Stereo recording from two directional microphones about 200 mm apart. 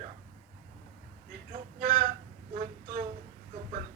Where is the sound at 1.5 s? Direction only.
45° right (ahead or behind).